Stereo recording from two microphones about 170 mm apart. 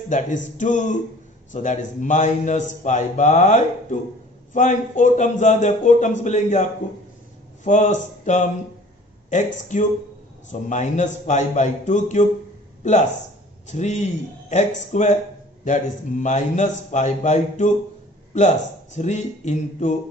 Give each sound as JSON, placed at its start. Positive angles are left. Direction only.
{"t": 0.1, "sound": "a man's voice", "side_deg": 45}